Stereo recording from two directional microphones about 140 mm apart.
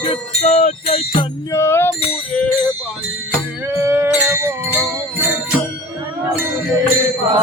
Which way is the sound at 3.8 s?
20° right (ahead or behind).